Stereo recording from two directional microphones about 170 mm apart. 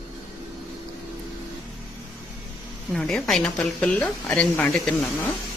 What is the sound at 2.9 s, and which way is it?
A woman's voice, centre (ahead or behind).